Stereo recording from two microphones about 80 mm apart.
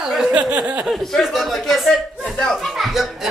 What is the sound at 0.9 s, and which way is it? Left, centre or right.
Speech, centre.